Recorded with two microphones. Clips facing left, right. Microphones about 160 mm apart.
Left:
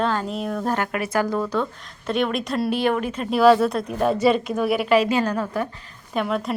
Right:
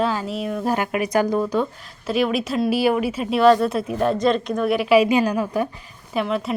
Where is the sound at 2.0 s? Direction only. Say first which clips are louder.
Right 2 dB; 5° right (ahead or behind).